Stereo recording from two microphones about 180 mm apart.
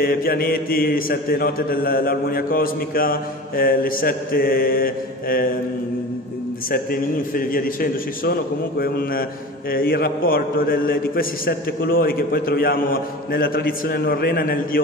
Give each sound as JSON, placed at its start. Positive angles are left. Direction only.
{"t": 0.0, "sound": "mantra", "side_deg": 55}
{"t": 6.7, "sound": "mantra", "side_deg": 55}